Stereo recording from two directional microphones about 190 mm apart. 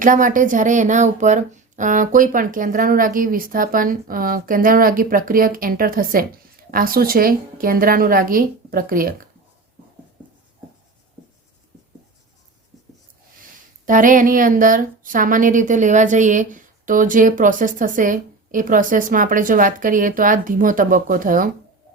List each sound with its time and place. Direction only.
0.0 s speech: 45° right (ahead or behind)
13.8 s speech: 45° right (ahead or behind)